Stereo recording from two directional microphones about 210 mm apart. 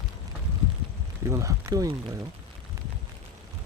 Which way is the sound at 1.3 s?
15° right (ahead or behind).